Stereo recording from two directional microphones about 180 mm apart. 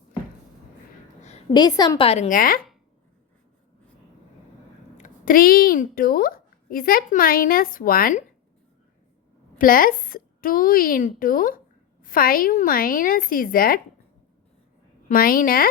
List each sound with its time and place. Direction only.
1.5 s a woman's voice: 20° left (ahead or behind)
2.0 s a woman's voice: 40° left (ahead or behind)
4.9 s a woman's voice: 45° left (ahead or behind)
9.6 s a woman's voice: 50° left (ahead or behind)
15.1 s a woman's voice: 50° left (ahead or behind)